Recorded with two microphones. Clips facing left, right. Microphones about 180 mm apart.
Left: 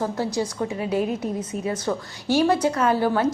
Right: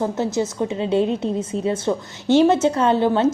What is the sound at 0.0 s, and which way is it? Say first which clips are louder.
A woman's voice: right 3 dB; 20° right (ahead or behind).